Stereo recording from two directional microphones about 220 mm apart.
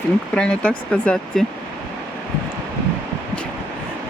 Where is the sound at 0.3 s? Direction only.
5° left (ahead or behind).